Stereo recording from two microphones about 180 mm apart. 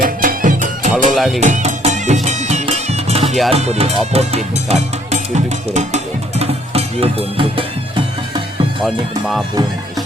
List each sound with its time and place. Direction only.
0.0 s music: 50° right (ahead or behind)
1.1 s music: centre (ahead or behind)
1.4 s music: 40° right (ahead or behind)
3.5 s speech: 35° right (ahead or behind)
6.4 s music: 35° right (ahead or behind)